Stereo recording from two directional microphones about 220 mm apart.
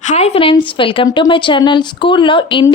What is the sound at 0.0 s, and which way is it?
A woman's voice, 30° left (ahead or behind).